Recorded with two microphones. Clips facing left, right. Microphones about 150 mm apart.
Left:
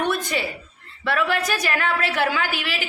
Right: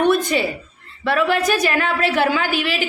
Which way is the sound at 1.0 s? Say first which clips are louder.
Right 5 dB; 20° right (ahead or behind).